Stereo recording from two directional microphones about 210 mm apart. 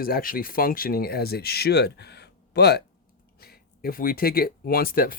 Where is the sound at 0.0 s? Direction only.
45° left (ahead or behind).